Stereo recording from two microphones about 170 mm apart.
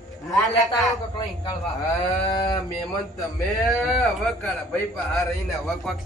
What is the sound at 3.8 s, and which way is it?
A man's voice, centre (ahead or behind).